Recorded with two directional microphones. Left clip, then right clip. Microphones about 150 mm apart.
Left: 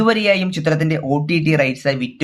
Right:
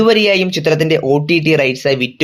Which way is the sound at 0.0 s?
35° right (ahead or behind).